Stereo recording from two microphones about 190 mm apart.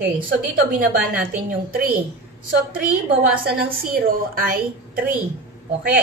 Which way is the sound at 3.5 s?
50° right (ahead or behind).